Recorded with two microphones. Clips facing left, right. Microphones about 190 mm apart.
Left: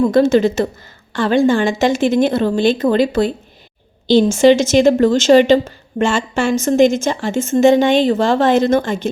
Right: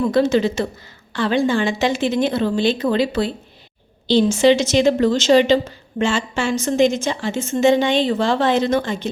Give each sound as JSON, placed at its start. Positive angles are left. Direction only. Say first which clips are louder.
{"t": 0.0, "sound": "a woman's voice", "louder": "left 4 dB", "side_deg": 45}